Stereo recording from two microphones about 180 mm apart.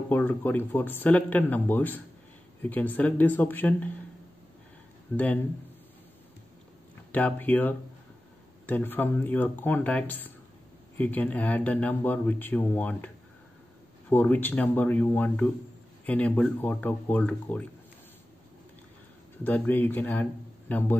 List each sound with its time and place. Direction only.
0.1 s speech: 10° left (ahead or behind)
5.1 s speech: 10° left (ahead or behind)
7.1 s speech: 10° left (ahead or behind)
19.4 s speech: 10° left (ahead or behind)